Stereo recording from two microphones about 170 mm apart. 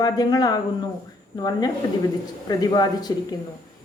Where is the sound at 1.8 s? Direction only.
25° left (ahead or behind).